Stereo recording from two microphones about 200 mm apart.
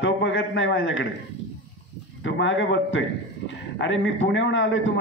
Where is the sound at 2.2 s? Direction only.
70° left (ahead or behind).